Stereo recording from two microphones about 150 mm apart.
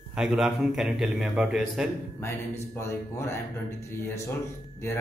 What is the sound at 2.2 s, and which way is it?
A man's voice, 20° left (ahead or behind).